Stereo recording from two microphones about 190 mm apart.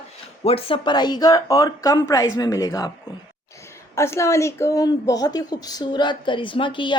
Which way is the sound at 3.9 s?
15° left (ahead or behind).